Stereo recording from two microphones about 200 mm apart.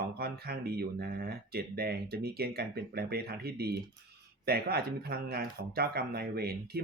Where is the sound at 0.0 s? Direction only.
50° right (ahead or behind).